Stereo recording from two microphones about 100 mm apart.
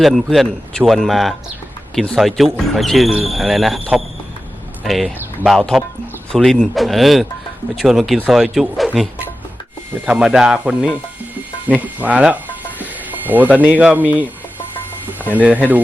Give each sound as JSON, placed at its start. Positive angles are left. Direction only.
{"t": 0.0, "sound": "speech", "side_deg": 0}
{"t": 4.8, "sound": "speech", "side_deg": 0}
{"t": 5.0, "sound": "speech", "side_deg": -10}
{"t": 5.5, "sound": "speech", "side_deg": 0}
{"t": 10.1, "sound": "speech", "side_deg": -5}